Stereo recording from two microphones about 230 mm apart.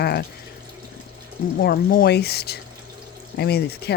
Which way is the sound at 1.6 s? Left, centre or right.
Left.